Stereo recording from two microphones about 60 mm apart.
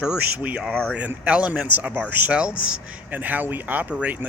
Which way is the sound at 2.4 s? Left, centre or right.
Centre.